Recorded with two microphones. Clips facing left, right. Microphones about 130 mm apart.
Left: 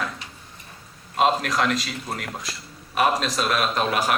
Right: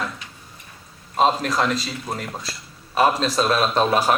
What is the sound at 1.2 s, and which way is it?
A man's voice, 35° right (ahead or behind).